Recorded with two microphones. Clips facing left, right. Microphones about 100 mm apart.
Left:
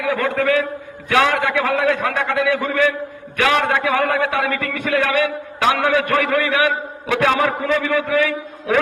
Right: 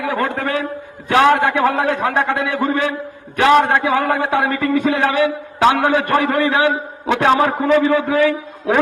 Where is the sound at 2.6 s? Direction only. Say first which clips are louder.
Even; 25° right (ahead or behind).